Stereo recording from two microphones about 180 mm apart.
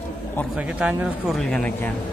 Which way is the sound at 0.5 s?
5° right (ahead or behind).